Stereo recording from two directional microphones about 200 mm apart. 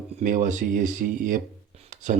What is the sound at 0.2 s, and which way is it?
Speech, 40° right (ahead or behind).